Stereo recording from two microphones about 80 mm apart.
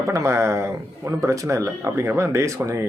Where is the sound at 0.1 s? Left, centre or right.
Right.